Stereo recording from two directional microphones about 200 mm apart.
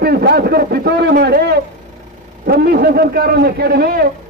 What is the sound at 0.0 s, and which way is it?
A man's voice, 50° right (ahead or behind).